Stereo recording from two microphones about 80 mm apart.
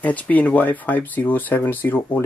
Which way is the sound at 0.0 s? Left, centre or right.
Centre.